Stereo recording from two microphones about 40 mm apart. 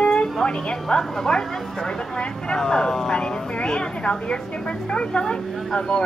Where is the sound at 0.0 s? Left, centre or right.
Left.